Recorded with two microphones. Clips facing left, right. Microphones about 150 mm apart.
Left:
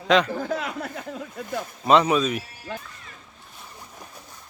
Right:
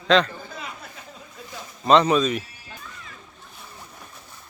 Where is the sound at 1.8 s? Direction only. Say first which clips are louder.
Right 1 dB; 10° left (ahead or behind).